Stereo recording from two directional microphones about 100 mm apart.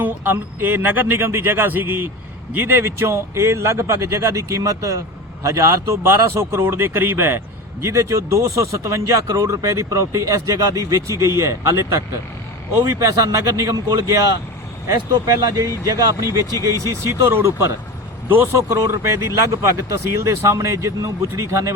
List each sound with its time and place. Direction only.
0.0 s speech: 20° right (ahead or behind); by 16.5 s 35° right (ahead or behind)
17.0 s speech: 25° right (ahead or behind)